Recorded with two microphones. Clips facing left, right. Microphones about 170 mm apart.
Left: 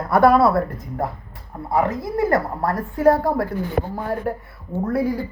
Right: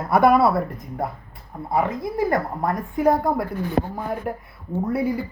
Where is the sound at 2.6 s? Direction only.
15° right (ahead or behind).